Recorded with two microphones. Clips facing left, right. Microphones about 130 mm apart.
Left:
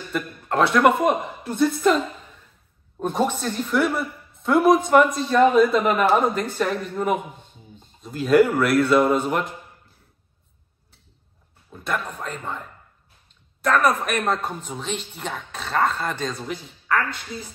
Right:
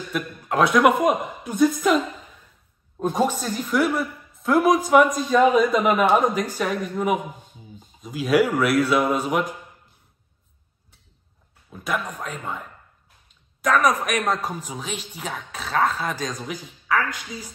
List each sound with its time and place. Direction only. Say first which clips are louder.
0.1 s speech: left 1 dB; centre (ahead or behind)
11.7 s speech: even; centre (ahead or behind)